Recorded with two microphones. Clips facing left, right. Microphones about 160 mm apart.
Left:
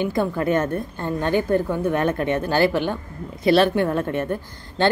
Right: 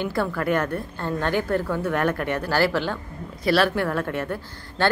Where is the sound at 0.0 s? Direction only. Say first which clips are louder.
Left 3 dB; 20° left (ahead or behind).